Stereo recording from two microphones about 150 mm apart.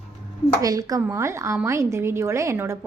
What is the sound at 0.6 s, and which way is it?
A woman's voice, 25° right (ahead or behind).